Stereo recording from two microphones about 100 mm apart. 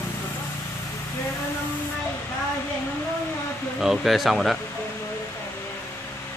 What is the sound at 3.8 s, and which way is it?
Speech, 5° right (ahead or behind).